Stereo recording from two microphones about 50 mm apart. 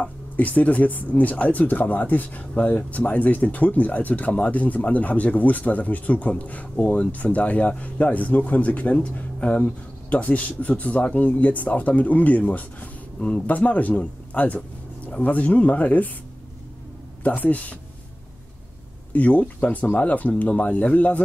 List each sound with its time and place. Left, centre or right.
0.0 s speech: left
2.5 s speech: left
17.2 s speech: left
19.1 s speech: left